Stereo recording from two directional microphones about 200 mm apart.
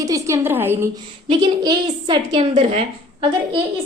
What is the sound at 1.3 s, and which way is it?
A woman's voice, 20° right (ahead or behind).